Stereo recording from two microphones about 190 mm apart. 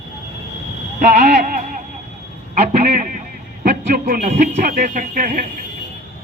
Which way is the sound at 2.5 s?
35° right (ahead or behind).